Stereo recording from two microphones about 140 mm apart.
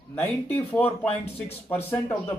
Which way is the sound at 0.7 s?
10° left (ahead or behind).